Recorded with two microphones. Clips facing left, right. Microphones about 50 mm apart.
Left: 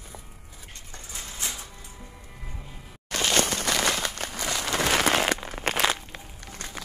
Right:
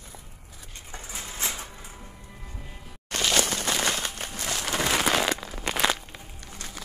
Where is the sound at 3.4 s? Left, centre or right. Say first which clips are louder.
Left 1 dB; left.